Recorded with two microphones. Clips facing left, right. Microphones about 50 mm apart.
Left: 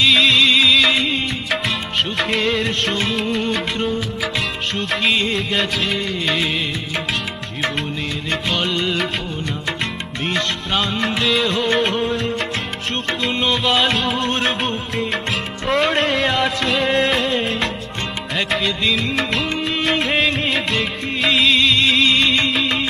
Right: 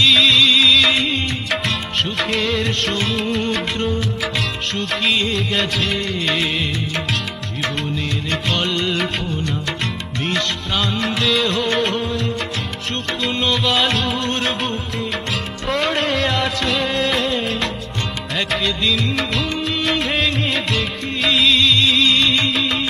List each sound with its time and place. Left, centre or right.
0.0 s music: centre
2.1 s music of bollywood: centre
2.5 s music: centre
3.2 s music of bollywood: centre
4.7 s music: centre
8.3 s music of bollywood: centre
10.8 s music: centre
13.2 s music: centre
15.6 s music: centre
18.5 s music of bollywood: centre
19.5 s music: centre
21.8 s music: left
22.4 s music: centre